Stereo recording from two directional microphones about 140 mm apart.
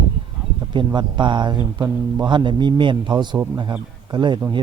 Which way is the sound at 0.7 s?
35° right (ahead or behind).